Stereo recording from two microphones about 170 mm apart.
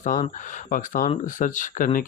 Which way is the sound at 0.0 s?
50° left (ahead or behind).